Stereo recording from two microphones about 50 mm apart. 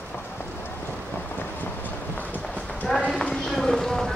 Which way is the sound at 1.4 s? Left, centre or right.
Left.